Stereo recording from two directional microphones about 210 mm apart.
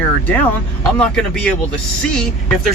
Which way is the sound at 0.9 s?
5° left (ahead or behind).